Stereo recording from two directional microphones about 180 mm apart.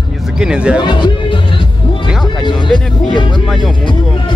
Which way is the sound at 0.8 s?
25° left (ahead or behind).